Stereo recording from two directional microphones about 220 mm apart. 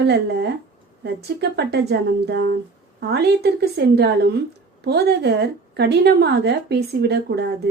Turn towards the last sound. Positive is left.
turn(degrees=-50)  # may be behind; listen again after turning